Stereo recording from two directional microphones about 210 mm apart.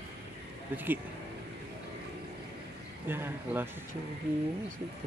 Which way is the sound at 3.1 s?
10° right (ahead or behind).